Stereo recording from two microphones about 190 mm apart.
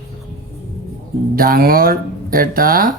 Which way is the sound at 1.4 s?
50° right (ahead or behind).